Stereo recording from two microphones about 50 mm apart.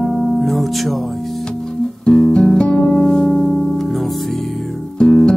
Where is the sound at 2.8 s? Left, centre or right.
Centre.